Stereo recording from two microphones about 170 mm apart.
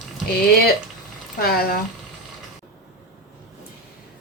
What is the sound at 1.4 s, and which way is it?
Speech, 65° left (ahead or behind).